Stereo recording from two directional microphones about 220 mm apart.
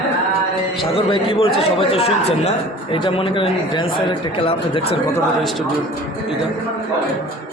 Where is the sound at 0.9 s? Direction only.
25° left (ahead or behind).